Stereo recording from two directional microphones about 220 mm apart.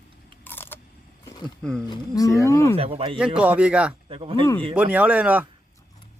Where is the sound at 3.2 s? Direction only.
5° right (ahead or behind).